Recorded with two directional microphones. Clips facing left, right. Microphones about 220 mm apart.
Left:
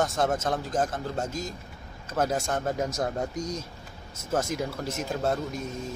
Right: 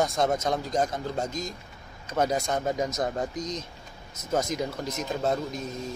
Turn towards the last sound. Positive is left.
turn(degrees=5)  # may be behind; listen again after turning